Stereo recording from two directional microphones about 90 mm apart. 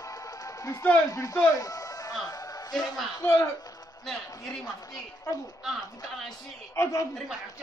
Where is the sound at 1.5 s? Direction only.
45° left (ahead or behind).